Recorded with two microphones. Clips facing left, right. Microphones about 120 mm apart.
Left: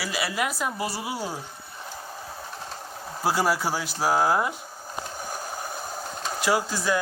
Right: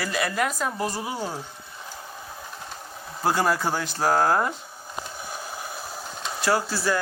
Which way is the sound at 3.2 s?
10° left (ahead or behind).